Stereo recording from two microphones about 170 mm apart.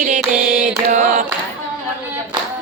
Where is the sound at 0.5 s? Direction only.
55° right (ahead or behind).